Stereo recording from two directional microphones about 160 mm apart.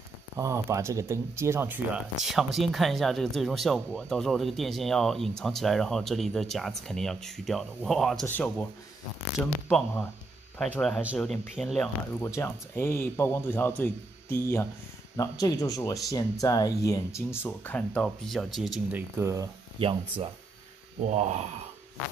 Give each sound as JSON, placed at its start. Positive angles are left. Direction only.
{"t": 0.4, "sound": "speech", "side_deg": -20}
{"t": 2.2, "sound": "a man's voice", "side_deg": 0}
{"t": 12.2, "sound": "a man's voice", "side_deg": 15}
{"t": 18.9, "sound": "speech", "side_deg": -10}
{"t": 19.8, "sound": "speech", "side_deg": -35}
{"t": 21.1, "sound": "speech", "side_deg": -45}